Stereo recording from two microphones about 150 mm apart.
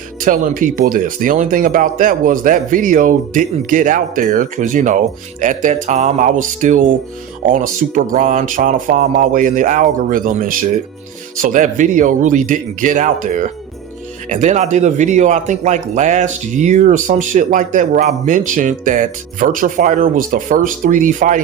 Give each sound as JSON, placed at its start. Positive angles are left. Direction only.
{"t": 0.2, "sound": "speech", "side_deg": -60}